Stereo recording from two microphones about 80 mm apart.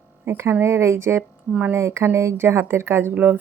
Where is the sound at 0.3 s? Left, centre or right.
Right.